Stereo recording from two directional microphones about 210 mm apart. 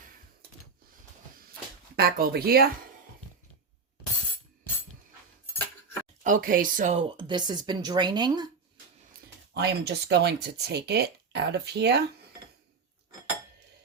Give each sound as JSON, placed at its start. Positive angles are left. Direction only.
{"t": 2.0, "sound": "speech", "side_deg": -45}
{"t": 6.2, "sound": "speech", "side_deg": -40}
{"t": 7.2, "sound": "speech", "side_deg": -20}
{"t": 9.6, "sound": "speech", "side_deg": -50}